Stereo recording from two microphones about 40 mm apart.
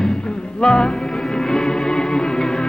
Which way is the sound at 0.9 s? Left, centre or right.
Centre.